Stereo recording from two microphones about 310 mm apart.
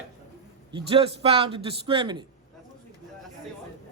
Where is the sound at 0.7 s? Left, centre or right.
Centre.